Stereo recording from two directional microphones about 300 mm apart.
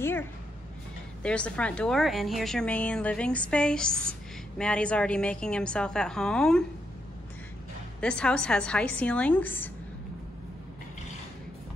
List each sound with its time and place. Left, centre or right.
0.0 s a sound: centre
1.2 s a woman's voice: centre
8.0 s a woman's voice: centre